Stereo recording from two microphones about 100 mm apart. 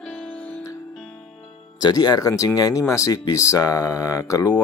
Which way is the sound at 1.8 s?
45° left (ahead or behind).